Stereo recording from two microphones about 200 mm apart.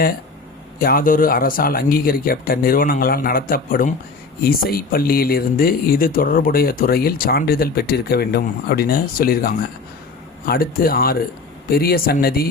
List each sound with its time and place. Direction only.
0.8 s speech: 45° left (ahead or behind)